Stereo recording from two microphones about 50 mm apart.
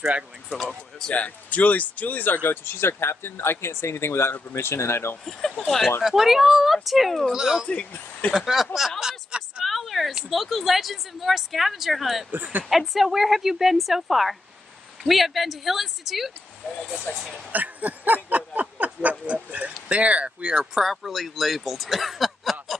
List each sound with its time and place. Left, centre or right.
0.5 s speech: centre
1.1 s speech: left
6.0 s speech: centre
7.3 s speech: centre
7.6 s speech: centre
8.3 s speech: centre
9.3 s a sound: right
9.7 s a sound: centre
10.3 s speech: centre
12.3 s speech: right
12.6 s speech: centre
16.6 s speech: centre
17.5 s a sound: right
20.8 s speech: centre